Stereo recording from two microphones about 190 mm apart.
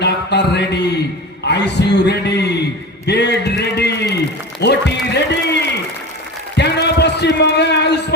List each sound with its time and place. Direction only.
0.0 s mantra: 60° left (ahead or behind)
1.5 s a man's voice: 65° left (ahead or behind)
6.6 s a sound: 60° left (ahead or behind)